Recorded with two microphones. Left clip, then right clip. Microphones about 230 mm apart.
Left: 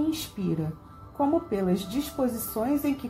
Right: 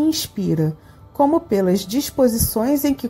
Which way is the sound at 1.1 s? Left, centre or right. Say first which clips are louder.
Right 9 dB; right.